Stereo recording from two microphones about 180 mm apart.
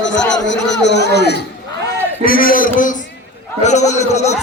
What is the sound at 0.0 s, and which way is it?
Speech, 85° left.